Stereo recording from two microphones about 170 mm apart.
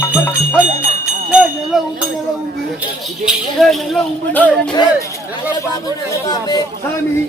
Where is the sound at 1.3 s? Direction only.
Centre (ahead or behind).